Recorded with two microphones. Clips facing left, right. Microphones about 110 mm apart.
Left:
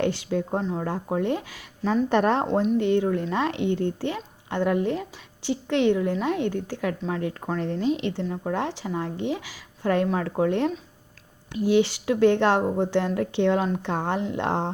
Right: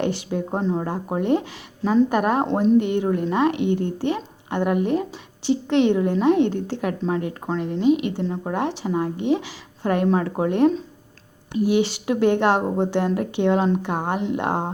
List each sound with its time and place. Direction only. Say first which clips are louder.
0.0 s a woman's voice: right 1 dB; 20° right (ahead or behind)
2.5 s speech: right 5 dB; 30° right (ahead or behind)
2.8 s a woman's voice: right 1 dB; 20° right (ahead or behind)
11.7 s a woman's voice: left 1 dB; 20° right (ahead or behind)